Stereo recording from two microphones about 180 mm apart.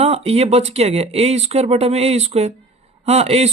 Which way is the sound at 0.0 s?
35° right (ahead or behind).